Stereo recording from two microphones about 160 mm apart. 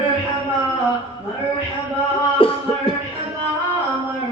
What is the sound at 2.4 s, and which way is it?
Music, 35° left (ahead or behind).